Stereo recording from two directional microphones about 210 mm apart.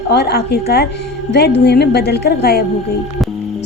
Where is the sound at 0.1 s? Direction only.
50° left (ahead or behind).